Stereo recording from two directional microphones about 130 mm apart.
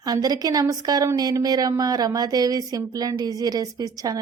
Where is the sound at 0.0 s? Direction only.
30° right (ahead or behind).